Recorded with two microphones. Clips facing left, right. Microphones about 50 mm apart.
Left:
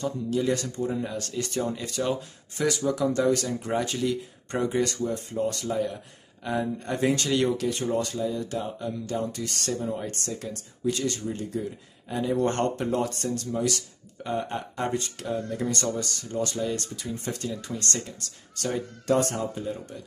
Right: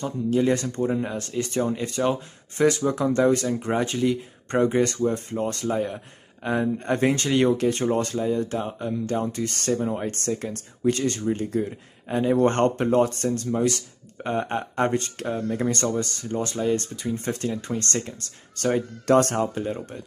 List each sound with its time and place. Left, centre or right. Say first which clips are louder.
0.0 s speech: right 4 dB; right
0.9 s speech: right 4 dB; right
4.5 s speech: right 5 dB; right
19.0 s speech: right 5 dB; right